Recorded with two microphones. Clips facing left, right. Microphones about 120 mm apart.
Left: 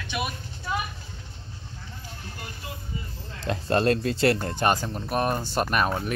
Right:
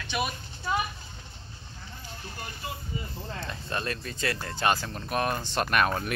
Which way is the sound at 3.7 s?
65° left (ahead or behind).